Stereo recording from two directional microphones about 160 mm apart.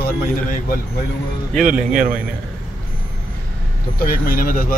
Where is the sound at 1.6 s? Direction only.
55° right (ahead or behind).